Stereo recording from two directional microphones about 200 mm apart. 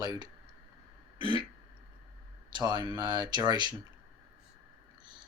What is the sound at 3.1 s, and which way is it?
Speech, 20° right (ahead or behind).